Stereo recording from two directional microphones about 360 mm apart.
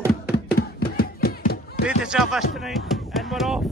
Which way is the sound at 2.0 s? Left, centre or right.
Centre.